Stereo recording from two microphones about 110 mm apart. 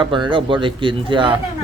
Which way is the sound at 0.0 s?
45° right (ahead or behind).